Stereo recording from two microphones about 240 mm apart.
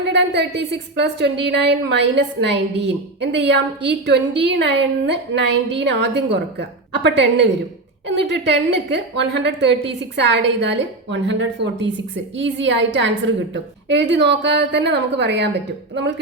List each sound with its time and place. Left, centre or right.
0.0 s a woman's voice: right